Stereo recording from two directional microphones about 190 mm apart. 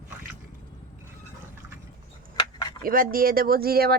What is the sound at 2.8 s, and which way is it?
Speech, 50° right (ahead or behind).